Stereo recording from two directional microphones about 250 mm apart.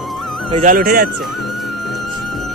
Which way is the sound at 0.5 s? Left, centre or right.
Right.